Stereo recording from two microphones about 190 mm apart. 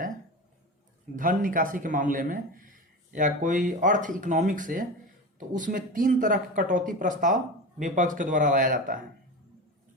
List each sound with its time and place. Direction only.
1.1 s speech: 45° right (ahead or behind)